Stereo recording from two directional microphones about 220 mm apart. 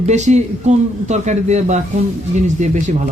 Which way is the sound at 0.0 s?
30° right (ahead or behind).